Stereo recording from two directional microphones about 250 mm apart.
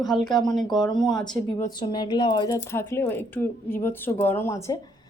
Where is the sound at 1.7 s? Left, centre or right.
Centre.